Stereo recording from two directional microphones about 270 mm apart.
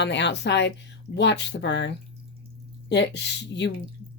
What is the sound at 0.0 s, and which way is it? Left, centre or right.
Speech, left.